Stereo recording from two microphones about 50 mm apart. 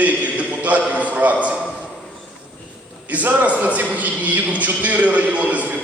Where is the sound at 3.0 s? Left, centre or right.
Right.